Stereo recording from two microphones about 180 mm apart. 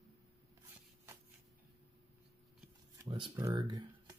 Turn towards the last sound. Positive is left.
turn(degrees=-25)  # may be behind; listen again after turning